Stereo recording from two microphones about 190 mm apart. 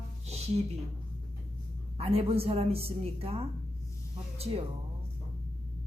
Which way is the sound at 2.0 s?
30° right (ahead or behind).